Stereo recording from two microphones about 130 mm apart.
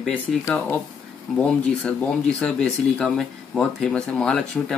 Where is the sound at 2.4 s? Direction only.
5° left (ahead or behind).